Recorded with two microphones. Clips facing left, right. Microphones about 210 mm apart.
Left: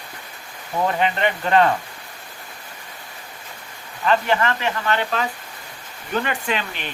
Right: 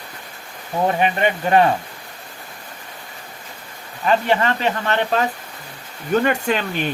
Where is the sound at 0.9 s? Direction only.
20° right (ahead or behind).